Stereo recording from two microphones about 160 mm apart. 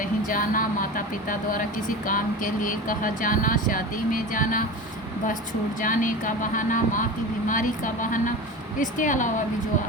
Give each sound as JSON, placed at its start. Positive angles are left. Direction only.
{"t": 0.0, "sound": "speech", "side_deg": 60}
{"t": 5.8, "sound": "speech", "side_deg": 55}